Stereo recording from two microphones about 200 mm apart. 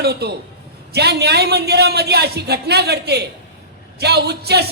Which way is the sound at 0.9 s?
55° right (ahead or behind).